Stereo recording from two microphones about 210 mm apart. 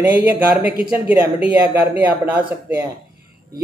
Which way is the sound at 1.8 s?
10° right (ahead or behind).